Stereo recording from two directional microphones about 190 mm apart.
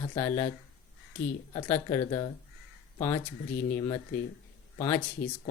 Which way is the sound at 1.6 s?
10° left (ahead or behind).